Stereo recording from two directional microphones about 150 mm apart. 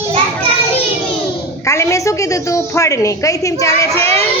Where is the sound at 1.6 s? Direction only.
20° left (ahead or behind).